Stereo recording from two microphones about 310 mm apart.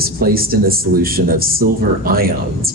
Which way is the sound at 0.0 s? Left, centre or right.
Right.